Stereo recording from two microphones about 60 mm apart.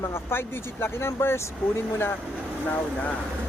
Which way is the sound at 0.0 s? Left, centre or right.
Left.